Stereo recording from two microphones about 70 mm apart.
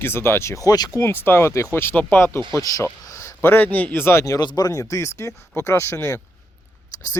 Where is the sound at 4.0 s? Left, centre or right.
Left.